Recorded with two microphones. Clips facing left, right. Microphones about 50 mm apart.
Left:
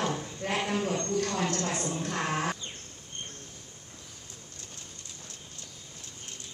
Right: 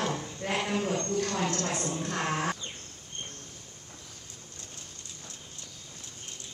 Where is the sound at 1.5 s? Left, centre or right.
Left.